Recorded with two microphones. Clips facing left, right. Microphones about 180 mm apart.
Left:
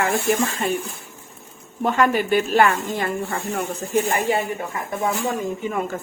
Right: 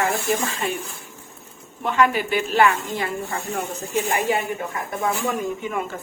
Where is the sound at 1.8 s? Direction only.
45° left (ahead or behind).